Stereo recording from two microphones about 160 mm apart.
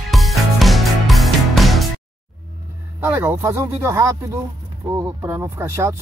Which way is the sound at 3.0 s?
15° right (ahead or behind).